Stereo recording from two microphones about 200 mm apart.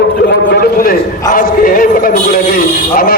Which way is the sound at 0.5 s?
45° left (ahead or behind).